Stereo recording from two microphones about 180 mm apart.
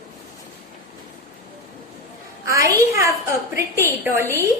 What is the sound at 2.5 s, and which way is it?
A woman's voice, 15° right (ahead or behind).